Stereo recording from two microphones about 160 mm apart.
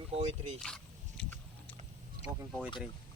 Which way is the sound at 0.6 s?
5° left (ahead or behind).